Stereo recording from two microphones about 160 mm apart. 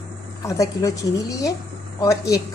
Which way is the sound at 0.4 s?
20° left (ahead or behind).